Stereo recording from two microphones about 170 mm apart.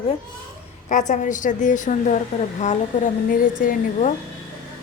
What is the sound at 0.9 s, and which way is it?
Speech, 45° left (ahead or behind).